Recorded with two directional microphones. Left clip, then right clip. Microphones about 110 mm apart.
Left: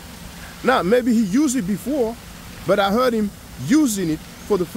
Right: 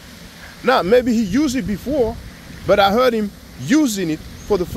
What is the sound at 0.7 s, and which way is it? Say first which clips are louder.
Speech: right 3 dB; 20° left (ahead or behind).